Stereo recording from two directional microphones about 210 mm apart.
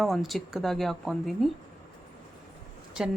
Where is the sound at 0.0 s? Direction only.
Centre (ahead or behind).